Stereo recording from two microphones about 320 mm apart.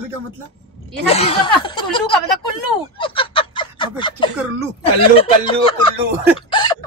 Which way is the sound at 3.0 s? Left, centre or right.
Centre.